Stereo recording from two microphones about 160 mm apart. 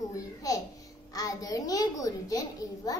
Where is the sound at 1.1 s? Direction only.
25° left (ahead or behind).